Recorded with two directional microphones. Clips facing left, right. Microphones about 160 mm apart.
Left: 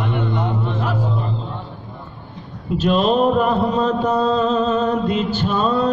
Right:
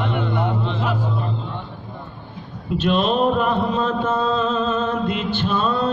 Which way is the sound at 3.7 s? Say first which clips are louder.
Left 3 dB; 40° left (ahead or behind).